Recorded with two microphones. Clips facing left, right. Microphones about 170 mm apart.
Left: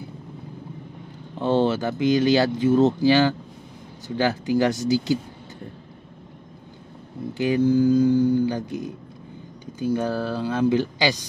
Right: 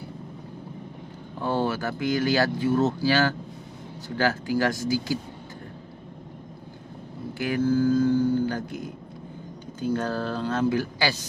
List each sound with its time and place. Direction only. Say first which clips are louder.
1.4 s speech: left 5 dB; 20° left (ahead or behind)
7.3 s speech: left 4 dB; 20° left (ahead or behind)